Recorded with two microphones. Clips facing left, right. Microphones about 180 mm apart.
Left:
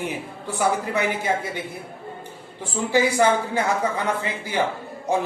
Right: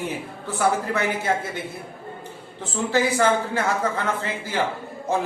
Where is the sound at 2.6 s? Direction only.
10° left (ahead or behind).